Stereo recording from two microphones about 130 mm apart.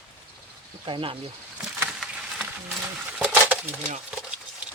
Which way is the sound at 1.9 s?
5° right (ahead or behind).